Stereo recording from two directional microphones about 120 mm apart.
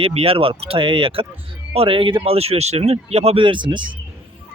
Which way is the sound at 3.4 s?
45° right (ahead or behind).